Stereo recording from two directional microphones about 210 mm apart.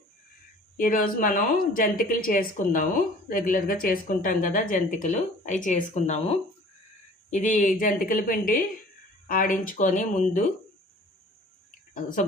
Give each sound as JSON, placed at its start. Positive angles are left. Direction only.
{"t": 0.8, "sound": "speech", "side_deg": 40}